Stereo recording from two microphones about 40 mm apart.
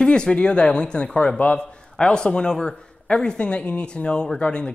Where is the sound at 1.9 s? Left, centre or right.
Left.